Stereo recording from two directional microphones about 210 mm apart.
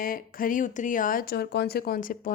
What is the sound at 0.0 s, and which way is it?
Speech, 40° left (ahead or behind).